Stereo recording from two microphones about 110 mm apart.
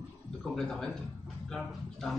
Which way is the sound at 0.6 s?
5° left (ahead or behind).